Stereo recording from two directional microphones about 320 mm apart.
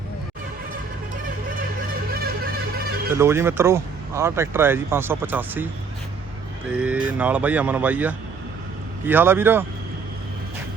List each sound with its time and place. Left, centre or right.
2.1 s music: right
3.2 s speech: centre
6.7 s speech: centre